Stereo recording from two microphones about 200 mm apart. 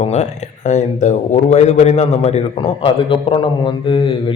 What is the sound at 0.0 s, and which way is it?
A man's voice, 35° left (ahead or behind).